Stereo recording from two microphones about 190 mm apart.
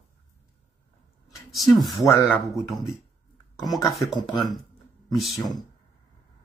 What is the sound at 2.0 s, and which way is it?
Speech, 15° left (ahead or behind).